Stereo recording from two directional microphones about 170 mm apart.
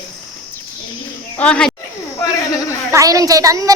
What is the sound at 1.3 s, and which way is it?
Snake, 5° left (ahead or behind).